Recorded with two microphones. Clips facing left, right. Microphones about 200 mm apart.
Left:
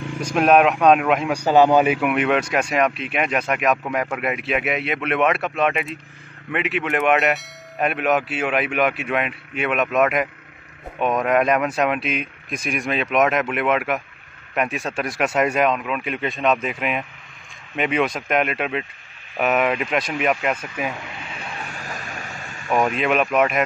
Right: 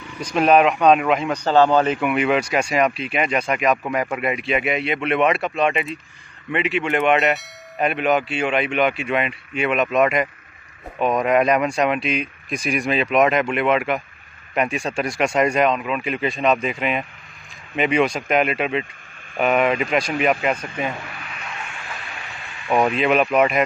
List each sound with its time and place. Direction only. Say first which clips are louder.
0.3 s speech: even; centre (ahead or behind)
1.3 s a man's voice: left 1 dB; 15° left (ahead or behind)
21.1 s a sound: left 1 dB; 25° left (ahead or behind); by 22.7 s 45° left (ahead or behind)
22.8 s speech: right 2 dB; centre (ahead or behind)